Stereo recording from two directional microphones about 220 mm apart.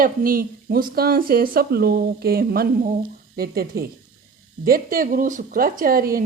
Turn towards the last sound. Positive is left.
turn(degrees=-40)  # may be behind; listen again after turning